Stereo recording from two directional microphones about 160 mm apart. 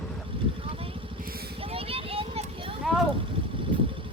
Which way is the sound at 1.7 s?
35° right (ahead or behind).